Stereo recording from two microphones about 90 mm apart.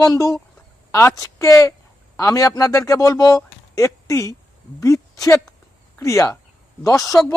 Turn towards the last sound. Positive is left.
turn(degrees=40)  # may be behind; listen again after turning